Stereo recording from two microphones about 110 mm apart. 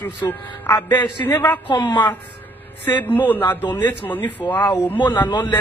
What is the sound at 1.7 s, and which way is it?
Speech, 45° left (ahead or behind).